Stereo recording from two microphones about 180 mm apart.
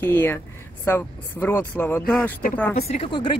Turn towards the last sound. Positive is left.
turn(degrees=25)  # may be behind; listen again after turning